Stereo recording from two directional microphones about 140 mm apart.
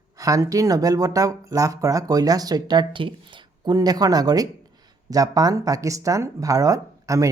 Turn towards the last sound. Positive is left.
turn(degrees=-25)  # may be behind; listen again after turning